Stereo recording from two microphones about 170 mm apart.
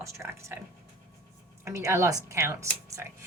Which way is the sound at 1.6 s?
15° right (ahead or behind).